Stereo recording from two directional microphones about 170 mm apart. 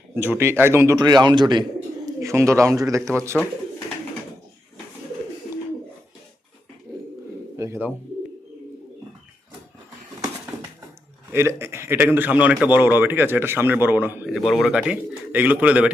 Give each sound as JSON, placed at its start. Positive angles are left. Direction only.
{"t": 0.1, "sound": "a man's voice", "side_deg": -15}
{"t": 7.5, "sound": "speech", "side_deg": -15}
{"t": 11.3, "sound": "a man's voice", "side_deg": -15}
{"t": 14.3, "sound": "speech", "side_deg": 0}